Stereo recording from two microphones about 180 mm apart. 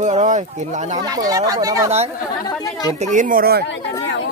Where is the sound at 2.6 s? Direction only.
20° left (ahead or behind).